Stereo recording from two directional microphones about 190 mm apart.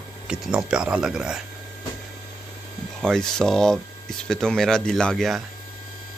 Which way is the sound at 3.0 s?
5° left (ahead or behind).